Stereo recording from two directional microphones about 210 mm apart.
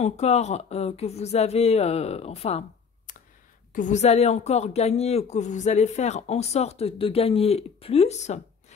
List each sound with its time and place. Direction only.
0.0 s speech: 30° left (ahead or behind)
3.1 s a sound: 35° left (ahead or behind)
3.7 s speech: 35° left (ahead or behind)